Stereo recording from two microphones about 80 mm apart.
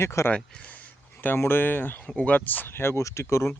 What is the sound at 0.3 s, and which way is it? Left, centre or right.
Speech, centre.